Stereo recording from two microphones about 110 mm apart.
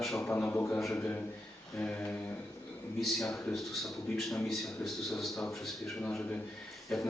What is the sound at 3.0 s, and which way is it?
A man's voice, 5° left (ahead or behind).